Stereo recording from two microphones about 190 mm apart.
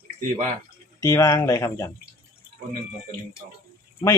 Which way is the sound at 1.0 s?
15° left (ahead or behind).